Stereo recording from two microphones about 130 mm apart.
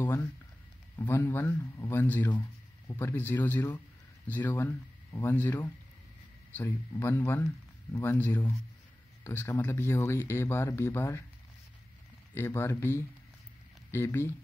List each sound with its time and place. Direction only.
0.0 s a sound: 15° left (ahead or behind)
0.9 s speech: 20° left (ahead or behind)
12.4 s speech: 20° left (ahead or behind)